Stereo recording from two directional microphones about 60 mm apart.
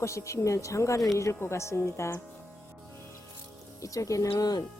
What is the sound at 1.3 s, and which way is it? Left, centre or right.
Speech, left.